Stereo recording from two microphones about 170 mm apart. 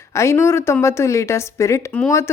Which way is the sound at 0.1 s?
15° left (ahead or behind).